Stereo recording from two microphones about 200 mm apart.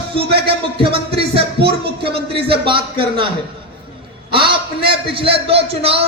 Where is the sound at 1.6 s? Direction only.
55° right (ahead or behind).